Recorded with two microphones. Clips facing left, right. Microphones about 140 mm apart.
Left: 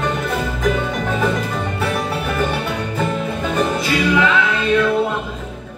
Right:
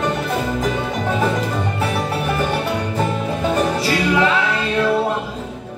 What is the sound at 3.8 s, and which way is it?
Music, 35° right (ahead or behind).